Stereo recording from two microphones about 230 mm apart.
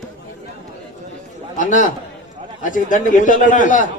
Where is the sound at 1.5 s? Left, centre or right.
Left.